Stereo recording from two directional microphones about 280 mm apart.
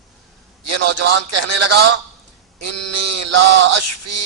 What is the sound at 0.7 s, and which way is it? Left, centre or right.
A man's voice, right.